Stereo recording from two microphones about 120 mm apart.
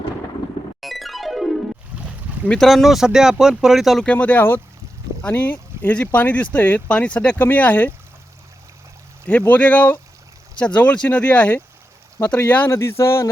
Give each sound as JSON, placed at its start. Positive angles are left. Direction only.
{"t": 0.8, "sound": "music", "side_deg": 0}
{"t": 2.5, "sound": "speech", "side_deg": 0}
{"t": 4.1, "sound": "speech", "side_deg": 10}
{"t": 9.5, "sound": "speech", "side_deg": 15}